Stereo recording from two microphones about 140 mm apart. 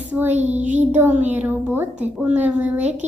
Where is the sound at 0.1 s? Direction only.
10° right (ahead or behind).